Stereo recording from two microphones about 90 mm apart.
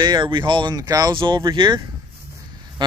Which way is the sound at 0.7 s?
45° right (ahead or behind).